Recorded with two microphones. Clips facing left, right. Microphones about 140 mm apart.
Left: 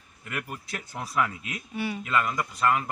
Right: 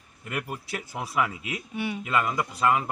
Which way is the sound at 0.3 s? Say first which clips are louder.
Right 3 dB; 15° right (ahead or behind).